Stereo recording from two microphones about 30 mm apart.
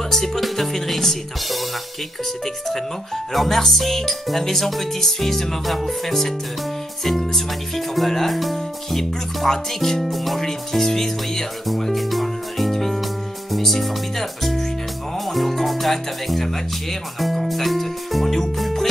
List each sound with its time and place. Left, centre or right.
0.1 s speech: centre
3.3 s speech: centre
10.4 s speech: centre
11.6 s music: centre
13.6 s speech: centre
15.1 s music: centre